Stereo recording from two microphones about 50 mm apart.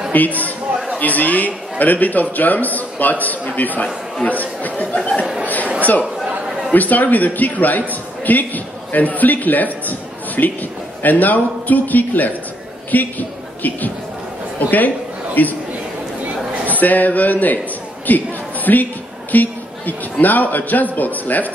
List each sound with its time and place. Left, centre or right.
0.1 s a man's voice: left
5.8 s chatter: left
6.7 s a man's voice: left
15.4 s a man's voice: left
16.8 s a man's voice: left
18.0 s a sound: left
19.3 s a man's voice: left